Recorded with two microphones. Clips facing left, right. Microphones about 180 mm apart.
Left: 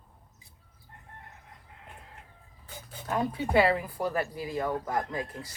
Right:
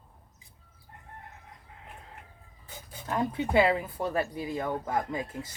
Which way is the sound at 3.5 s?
20° right (ahead or behind).